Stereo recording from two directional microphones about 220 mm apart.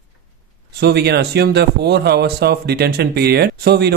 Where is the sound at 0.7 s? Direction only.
50° right (ahead or behind).